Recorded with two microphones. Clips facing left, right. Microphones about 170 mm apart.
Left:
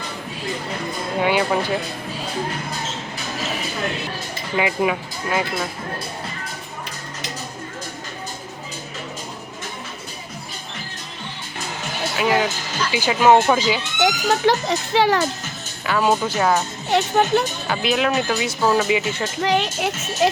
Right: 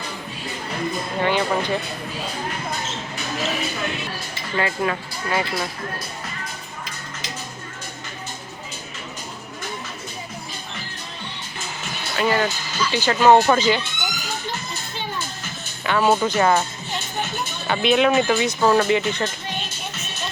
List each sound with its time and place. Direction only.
1.2 s speech: 5° left (ahead or behind)
4.5 s speech: 15° left (ahead or behind)
12.1 s speech: 5° left (ahead or behind)
14.0 s a child's voice: 80° left
15.8 s speech: centre (ahead or behind)
16.9 s a child's voice: 80° left
17.7 s speech: centre (ahead or behind)
19.4 s a child's voice: 90° left